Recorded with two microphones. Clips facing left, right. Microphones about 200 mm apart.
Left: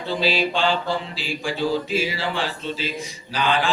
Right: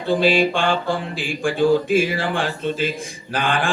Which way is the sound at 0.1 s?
50° right (ahead or behind).